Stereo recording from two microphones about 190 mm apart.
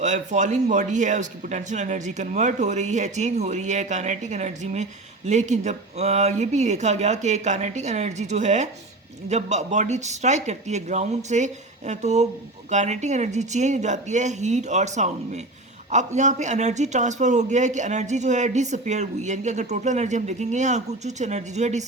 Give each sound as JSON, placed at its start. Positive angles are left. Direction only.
{"t": 0.0, "sound": "speech", "side_deg": -40}